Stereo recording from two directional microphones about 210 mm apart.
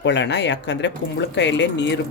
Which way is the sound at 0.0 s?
55° left (ahead or behind).